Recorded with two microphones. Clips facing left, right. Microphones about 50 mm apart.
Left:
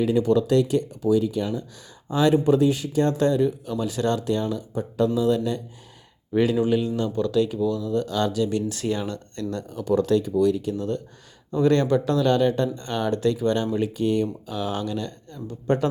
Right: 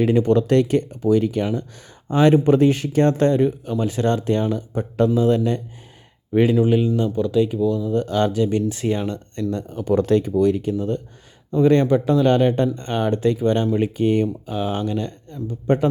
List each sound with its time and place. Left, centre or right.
0.0 s speech: right
6.3 s speech: right
7.9 s speech: right